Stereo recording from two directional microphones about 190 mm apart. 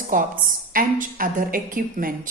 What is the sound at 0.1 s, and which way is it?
A woman's voice, 45° right (ahead or behind).